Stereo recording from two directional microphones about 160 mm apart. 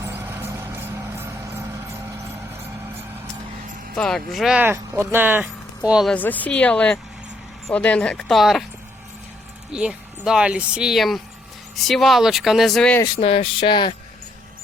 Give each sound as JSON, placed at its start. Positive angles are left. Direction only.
{"t": 0.0, "sound": "music", "side_deg": -15}
{"t": 3.9, "sound": "speech", "side_deg": 5}
{"t": 6.1, "sound": "speech", "side_deg": 10}
{"t": 9.7, "sound": "speech", "side_deg": -5}
{"t": 13.1, "sound": "a sound", "side_deg": 35}